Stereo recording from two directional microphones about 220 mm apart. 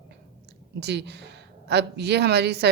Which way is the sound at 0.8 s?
50° right (ahead or behind).